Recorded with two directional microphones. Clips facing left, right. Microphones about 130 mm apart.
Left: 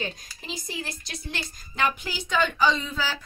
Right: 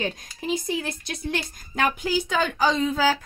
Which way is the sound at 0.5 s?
55° right (ahead or behind).